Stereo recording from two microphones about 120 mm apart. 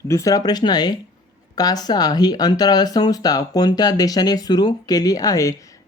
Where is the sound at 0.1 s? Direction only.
25° left (ahead or behind).